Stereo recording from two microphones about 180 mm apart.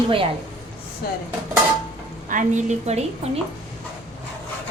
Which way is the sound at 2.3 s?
45° right (ahead or behind).